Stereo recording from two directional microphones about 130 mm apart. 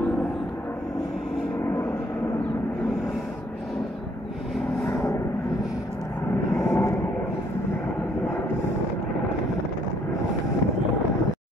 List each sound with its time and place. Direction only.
4.8 s vehicle: 25° left (ahead or behind)
6.5 s vehicle: 20° left (ahead or behind)